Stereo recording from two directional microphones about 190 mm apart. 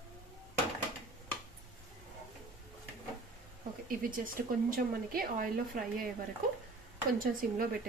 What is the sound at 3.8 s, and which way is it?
Speech, 45° right (ahead or behind).